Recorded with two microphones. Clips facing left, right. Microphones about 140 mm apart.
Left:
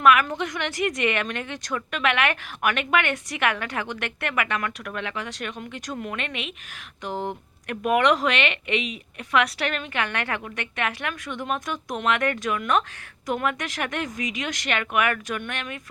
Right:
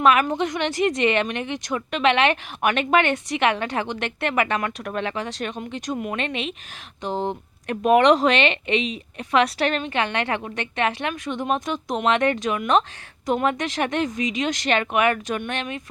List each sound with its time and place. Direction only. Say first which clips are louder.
0.0 s a woman's voice: right 1 dB; 25° right (ahead or behind)